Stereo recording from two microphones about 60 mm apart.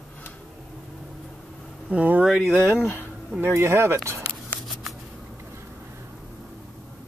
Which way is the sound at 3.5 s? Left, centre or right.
Right.